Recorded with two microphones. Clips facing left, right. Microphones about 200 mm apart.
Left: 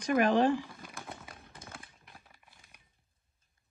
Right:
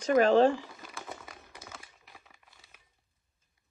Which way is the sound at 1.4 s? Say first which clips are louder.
Right 1 dB; 50° left (ahead or behind).